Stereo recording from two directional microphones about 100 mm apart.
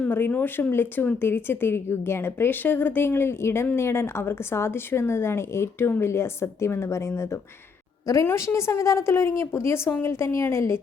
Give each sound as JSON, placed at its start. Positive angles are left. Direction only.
{"t": 0.0, "sound": "speech", "side_deg": 20}